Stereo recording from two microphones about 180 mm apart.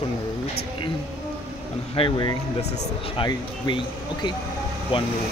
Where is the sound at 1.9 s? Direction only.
25° left (ahead or behind).